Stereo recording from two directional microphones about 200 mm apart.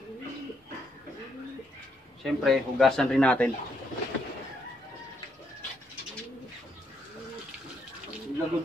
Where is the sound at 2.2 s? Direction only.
Centre (ahead or behind).